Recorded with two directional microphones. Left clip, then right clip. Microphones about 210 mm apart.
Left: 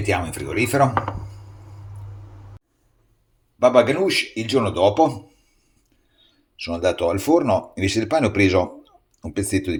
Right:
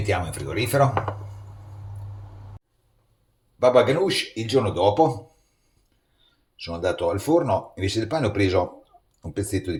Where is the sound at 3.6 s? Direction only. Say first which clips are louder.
Left 2 dB; 20° left (ahead or behind).